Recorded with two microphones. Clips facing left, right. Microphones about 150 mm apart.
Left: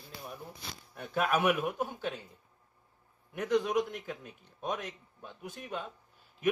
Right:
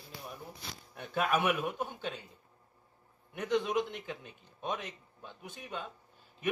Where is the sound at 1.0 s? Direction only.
Centre (ahead or behind).